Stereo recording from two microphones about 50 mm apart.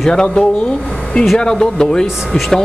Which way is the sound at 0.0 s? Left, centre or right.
Centre.